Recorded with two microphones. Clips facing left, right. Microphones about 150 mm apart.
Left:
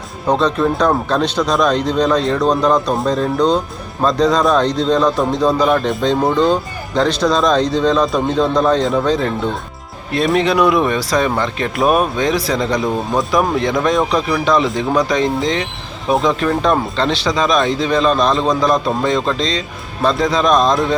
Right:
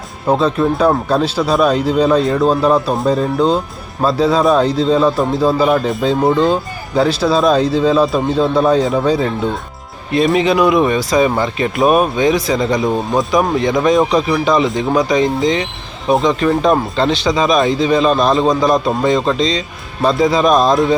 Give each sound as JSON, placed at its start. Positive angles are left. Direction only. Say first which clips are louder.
{"t": 0.3, "sound": "speech", "louder": "right 1 dB", "side_deg": -5}